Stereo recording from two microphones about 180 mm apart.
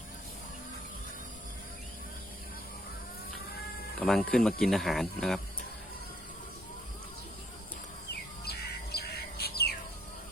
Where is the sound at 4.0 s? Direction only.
Centre (ahead or behind).